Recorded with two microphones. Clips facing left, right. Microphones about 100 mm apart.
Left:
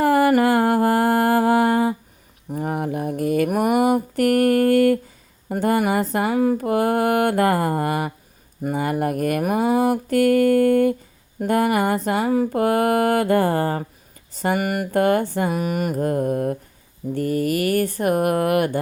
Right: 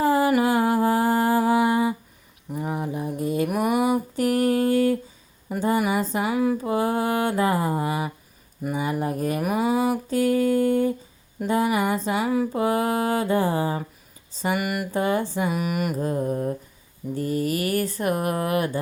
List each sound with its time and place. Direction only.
0.0 s mantra: 65° left (ahead or behind)
3.5 s a sound: 55° left (ahead or behind)
5.5 s mantra: 65° left (ahead or behind)
9.4 s mantra: 50° left (ahead or behind)
14.3 s speech: 50° left (ahead or behind)
14.9 s mantra: 60° left (ahead or behind)
17.2 s speech: 55° left (ahead or behind)